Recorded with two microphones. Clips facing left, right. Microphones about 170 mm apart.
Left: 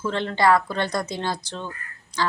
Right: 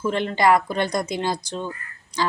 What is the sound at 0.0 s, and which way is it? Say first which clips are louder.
A woman's voice: right 1 dB; 15° right (ahead or behind).